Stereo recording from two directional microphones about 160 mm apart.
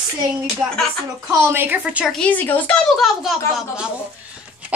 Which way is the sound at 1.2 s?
15° right (ahead or behind).